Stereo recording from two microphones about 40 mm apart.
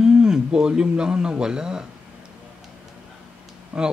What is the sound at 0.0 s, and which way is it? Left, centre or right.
Speech, centre.